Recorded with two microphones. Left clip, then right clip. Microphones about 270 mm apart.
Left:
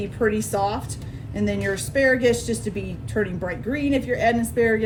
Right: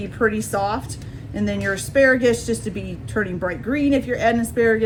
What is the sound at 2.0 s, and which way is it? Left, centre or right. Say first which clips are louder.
Speech: right 3 dB; centre.